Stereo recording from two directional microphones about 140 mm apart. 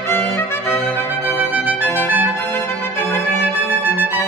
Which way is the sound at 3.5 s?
15° right (ahead or behind).